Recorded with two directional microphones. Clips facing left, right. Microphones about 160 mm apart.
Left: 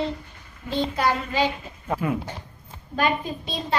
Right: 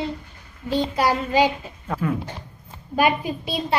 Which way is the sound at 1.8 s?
15° left (ahead or behind).